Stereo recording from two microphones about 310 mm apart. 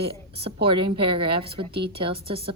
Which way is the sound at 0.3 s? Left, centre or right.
Centre.